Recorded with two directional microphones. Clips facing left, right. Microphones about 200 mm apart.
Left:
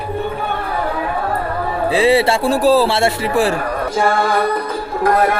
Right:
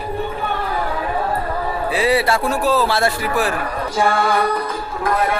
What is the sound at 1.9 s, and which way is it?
A man's voice, 25° left (ahead or behind).